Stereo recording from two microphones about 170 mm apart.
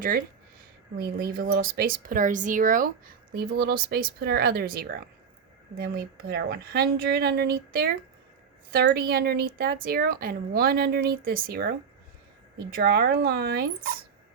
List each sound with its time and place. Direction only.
0.9 s speech: 60° right (ahead or behind)
3.3 s speech: 65° right (ahead or behind)
12.7 s speech: 70° right (ahead or behind)